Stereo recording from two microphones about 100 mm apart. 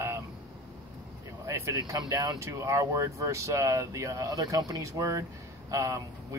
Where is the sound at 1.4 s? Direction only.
30° right (ahead or behind).